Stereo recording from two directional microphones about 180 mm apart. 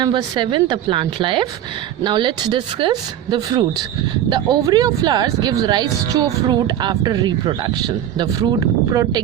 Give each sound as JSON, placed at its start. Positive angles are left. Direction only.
{"t": 0.0, "sound": "speech", "side_deg": -25}